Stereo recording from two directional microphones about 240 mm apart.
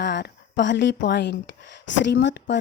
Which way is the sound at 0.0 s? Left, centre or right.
Left.